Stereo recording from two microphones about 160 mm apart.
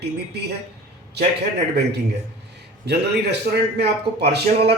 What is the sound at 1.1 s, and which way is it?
A man's voice, 90° right.